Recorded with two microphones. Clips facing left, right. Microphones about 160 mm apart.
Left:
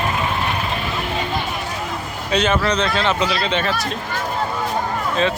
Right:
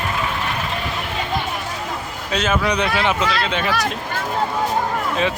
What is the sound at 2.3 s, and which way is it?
Speech, 5° right (ahead or behind).